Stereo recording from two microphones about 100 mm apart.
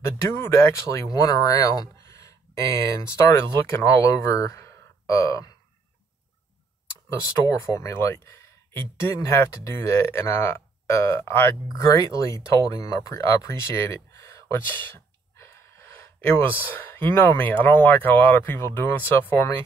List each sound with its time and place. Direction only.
0.0 s speech: 30° left (ahead or behind)
7.7 s speech: 30° left (ahead or behind)